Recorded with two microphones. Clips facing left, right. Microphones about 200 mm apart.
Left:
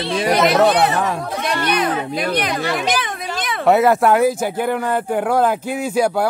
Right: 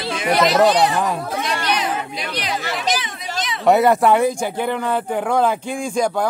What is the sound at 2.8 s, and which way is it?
Children playing, 55° left (ahead or behind).